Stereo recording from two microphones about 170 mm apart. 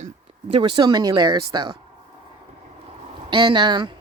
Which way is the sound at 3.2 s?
30° right (ahead or behind).